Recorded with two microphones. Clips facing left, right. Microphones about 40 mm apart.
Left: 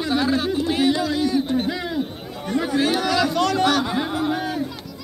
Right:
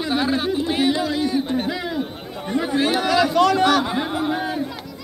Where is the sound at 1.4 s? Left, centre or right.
Centre.